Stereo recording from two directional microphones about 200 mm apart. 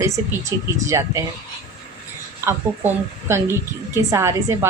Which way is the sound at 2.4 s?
15° right (ahead or behind).